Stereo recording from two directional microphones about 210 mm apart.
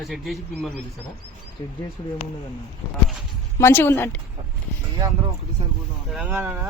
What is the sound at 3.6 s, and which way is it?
Speech, 10° left (ahead or behind).